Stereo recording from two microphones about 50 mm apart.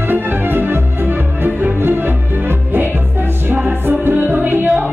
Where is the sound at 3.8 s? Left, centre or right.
Right.